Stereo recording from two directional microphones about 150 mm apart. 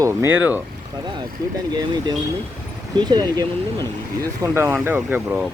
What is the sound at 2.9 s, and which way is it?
Speech, 30° right (ahead or behind).